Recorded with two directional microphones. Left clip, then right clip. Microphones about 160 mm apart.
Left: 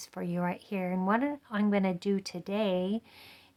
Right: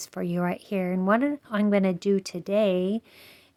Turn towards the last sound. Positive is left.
turn(degrees=-25)  # may be behind; listen again after turning